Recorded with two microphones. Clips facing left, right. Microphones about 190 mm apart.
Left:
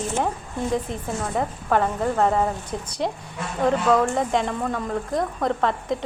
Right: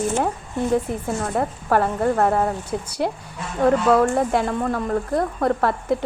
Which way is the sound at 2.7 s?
10° right (ahead or behind).